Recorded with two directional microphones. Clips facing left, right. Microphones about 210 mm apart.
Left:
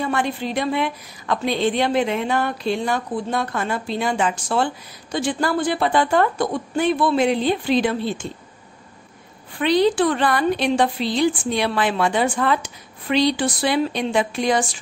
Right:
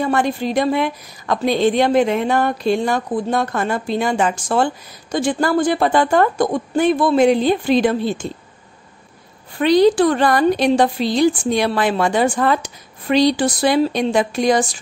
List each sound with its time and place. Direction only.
0.0 s a woman's voice: 40° right (ahead or behind)
9.6 s a woman's voice: 40° right (ahead or behind)